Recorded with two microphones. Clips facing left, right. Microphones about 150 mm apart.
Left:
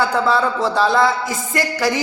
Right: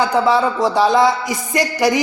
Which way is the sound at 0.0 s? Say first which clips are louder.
Right 2 dB; 15° right (ahead or behind).